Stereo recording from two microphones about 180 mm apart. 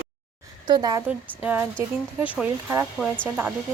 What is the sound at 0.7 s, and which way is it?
Speech, 20° right (ahead or behind).